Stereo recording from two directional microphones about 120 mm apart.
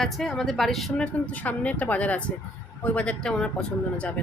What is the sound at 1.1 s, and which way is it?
A woman's voice, 10° left (ahead or behind).